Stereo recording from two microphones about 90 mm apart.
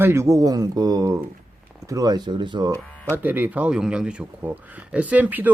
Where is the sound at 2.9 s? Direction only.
15° left (ahead or behind).